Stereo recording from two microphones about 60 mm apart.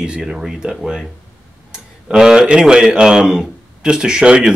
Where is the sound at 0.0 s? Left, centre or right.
Centre.